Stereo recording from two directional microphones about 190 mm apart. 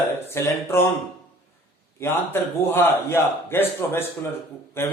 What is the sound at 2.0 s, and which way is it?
A man's voice, 10° left (ahead or behind).